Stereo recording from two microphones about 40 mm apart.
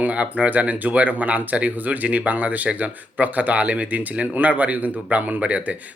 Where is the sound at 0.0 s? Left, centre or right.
Right.